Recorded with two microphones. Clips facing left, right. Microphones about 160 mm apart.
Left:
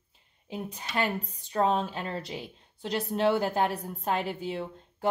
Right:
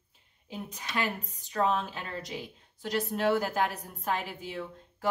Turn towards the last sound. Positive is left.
turn(degrees=30)  # may be behind; listen again after turning